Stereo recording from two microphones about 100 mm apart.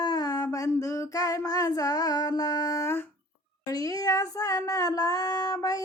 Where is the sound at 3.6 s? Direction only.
35° left (ahead or behind).